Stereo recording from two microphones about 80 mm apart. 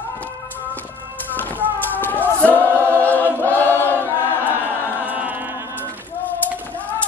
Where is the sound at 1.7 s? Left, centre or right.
Left.